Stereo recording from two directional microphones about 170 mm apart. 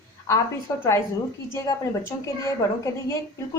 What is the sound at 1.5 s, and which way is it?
A woman's voice, 20° left (ahead or behind).